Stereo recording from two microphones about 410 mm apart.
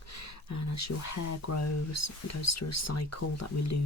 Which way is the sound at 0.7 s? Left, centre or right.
Left.